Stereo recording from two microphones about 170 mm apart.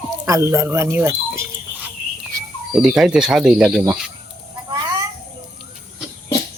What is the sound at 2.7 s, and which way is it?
Speech, 5° right (ahead or behind).